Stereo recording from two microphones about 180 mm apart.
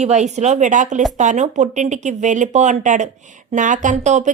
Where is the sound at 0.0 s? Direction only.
40° right (ahead or behind).